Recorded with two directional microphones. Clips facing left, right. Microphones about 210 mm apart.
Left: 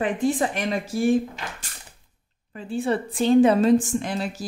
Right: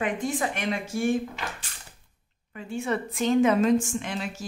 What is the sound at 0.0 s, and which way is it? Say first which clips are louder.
Speech: left 5 dB; 35° left (ahead or behind).